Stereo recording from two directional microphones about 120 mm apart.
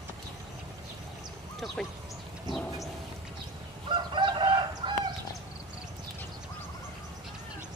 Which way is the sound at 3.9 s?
40° right (ahead or behind).